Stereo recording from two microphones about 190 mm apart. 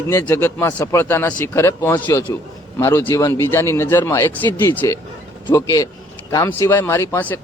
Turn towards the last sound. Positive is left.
turn(degrees=10)  # may be behind; listen again after turning